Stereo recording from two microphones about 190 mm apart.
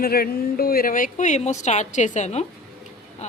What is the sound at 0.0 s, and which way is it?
A woman's voice, 55° left (ahead or behind).